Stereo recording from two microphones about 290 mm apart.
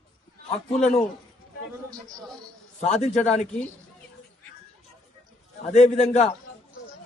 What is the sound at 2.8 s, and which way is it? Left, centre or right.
Speech, left.